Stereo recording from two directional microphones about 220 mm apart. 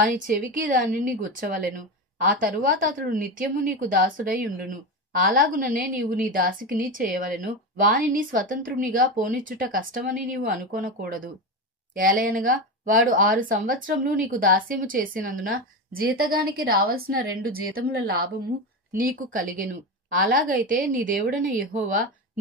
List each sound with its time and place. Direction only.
0.1 s a woman's voice: 35° right (ahead or behind)